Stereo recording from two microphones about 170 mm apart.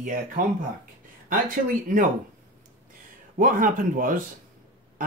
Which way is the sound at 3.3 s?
50° right (ahead or behind).